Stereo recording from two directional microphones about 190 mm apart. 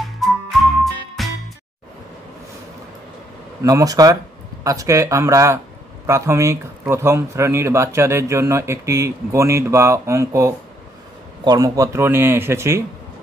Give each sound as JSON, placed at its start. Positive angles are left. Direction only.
{"t": 0.2, "sound": "music", "side_deg": 0}
{"t": 3.6, "sound": "speech", "side_deg": -20}